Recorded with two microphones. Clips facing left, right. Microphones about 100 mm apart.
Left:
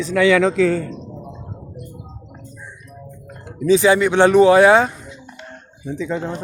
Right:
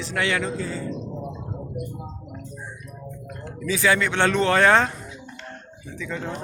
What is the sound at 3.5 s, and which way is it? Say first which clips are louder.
Speech: left 8 dB; 20° left (ahead or behind).